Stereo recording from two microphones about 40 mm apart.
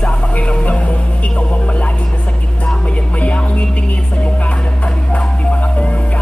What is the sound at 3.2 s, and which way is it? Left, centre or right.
Music, left.